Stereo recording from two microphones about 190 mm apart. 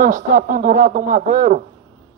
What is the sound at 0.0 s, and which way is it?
Speech, 45° right (ahead or behind).